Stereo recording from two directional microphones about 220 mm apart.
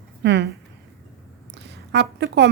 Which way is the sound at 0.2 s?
50° right (ahead or behind).